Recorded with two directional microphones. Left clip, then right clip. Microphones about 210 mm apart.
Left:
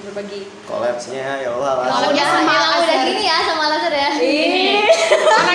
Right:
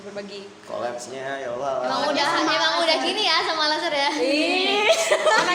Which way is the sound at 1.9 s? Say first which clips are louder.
Left 6 dB; 30° right (ahead or behind).